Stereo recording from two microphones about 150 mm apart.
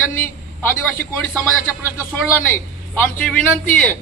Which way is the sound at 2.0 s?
15° left (ahead or behind).